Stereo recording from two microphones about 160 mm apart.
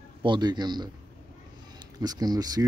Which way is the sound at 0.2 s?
30° right (ahead or behind).